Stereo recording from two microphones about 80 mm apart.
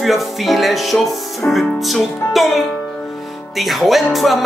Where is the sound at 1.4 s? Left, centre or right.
Left.